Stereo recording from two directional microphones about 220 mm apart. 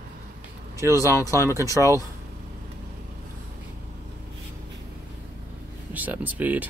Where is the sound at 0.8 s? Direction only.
15° right (ahead or behind).